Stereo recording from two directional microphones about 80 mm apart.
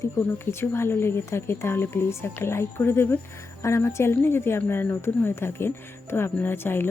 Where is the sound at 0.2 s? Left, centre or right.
Left.